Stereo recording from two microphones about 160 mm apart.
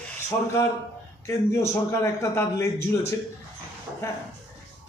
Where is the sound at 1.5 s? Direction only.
15° left (ahead or behind).